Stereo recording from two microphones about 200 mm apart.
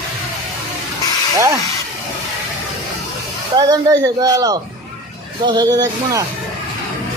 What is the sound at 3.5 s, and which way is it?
Speech, 20° right (ahead or behind).